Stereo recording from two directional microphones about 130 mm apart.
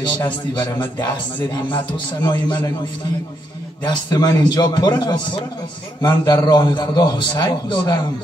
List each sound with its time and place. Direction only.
0.6 s a man's voice: 35° left (ahead or behind)
2.2 s a man's voice: 35° left (ahead or behind)
3.8 s a man's voice: 30° left (ahead or behind)